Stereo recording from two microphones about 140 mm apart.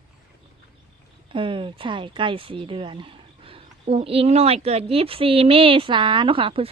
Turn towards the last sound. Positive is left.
turn(degrees=-40)  # may be behind; listen again after turning